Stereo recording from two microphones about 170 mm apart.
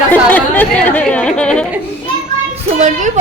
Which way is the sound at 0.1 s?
10° left (ahead or behind).